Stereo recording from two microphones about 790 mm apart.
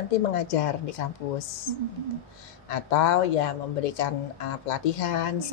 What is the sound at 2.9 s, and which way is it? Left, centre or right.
Speech, left.